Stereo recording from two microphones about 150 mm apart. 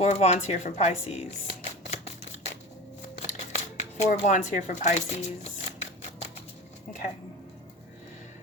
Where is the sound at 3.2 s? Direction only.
50° left (ahead or behind).